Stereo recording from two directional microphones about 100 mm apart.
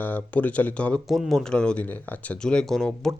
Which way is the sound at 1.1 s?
Centre (ahead or behind).